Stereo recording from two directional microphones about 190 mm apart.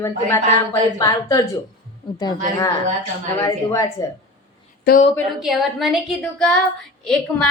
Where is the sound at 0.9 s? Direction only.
20° left (ahead or behind).